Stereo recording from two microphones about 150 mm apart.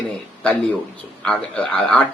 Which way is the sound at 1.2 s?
10° left (ahead or behind).